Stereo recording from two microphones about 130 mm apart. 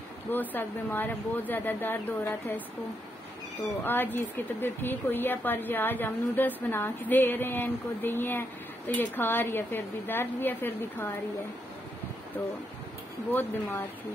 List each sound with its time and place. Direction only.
0.3 s speech: 15° left (ahead or behind)
3.8 s speech: 15° left (ahead or behind)
13.3 s speech: 15° left (ahead or behind)